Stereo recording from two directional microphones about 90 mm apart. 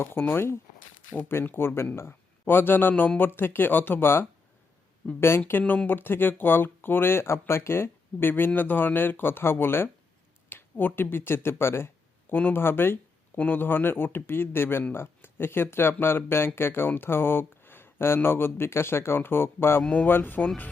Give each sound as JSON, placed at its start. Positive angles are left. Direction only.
{"t": 0.0, "sound": "speech", "side_deg": 25}
{"t": 5.5, "sound": "speech", "side_deg": 20}
{"t": 19.8, "sound": "speech", "side_deg": 5}
{"t": 20.1, "sound": "speech", "side_deg": 20}